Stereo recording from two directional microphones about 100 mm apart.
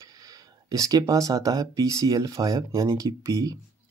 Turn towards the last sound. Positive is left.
turn(degrees=-35)  # may be behind; listen again after turning